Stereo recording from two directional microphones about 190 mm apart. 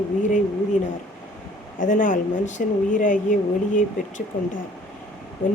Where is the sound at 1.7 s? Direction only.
45° left (ahead or behind).